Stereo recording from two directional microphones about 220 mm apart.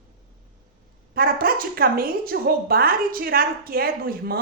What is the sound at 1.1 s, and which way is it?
A woman's voice, 40° right (ahead or behind).